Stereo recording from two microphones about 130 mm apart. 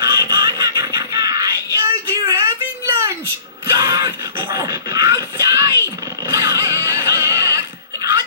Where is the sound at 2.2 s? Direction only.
30° right (ahead or behind).